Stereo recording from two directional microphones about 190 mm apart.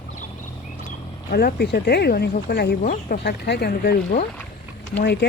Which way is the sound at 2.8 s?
40° left (ahead or behind).